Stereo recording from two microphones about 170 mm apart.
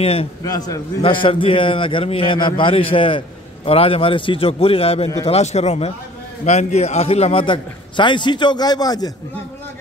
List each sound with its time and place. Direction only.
0.0 s a man's voice: 35° left (ahead or behind)
0.4 s a man's voice: 20° left (ahead or behind)